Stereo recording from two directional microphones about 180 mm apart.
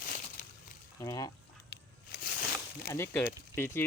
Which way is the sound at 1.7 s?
60° left (ahead or behind).